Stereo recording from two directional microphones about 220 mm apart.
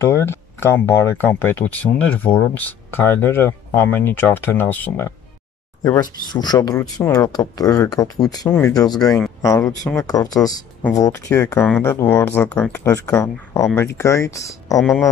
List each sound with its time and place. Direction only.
0.0 s speech: 10° left (ahead or behind)
14.8 s speech: centre (ahead or behind)